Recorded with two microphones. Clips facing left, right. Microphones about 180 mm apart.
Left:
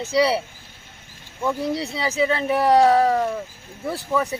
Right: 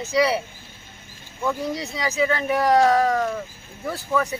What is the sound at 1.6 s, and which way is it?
Speech, 30° left (ahead or behind).